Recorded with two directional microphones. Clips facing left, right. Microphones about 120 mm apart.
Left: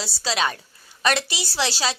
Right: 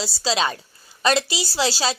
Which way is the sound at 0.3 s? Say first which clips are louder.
Right 2 dB; 30° right (ahead or behind).